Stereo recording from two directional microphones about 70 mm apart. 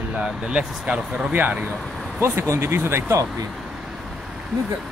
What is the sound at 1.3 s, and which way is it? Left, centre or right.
Speech, right.